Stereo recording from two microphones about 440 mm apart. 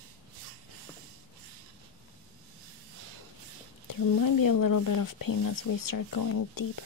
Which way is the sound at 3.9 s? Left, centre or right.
Left.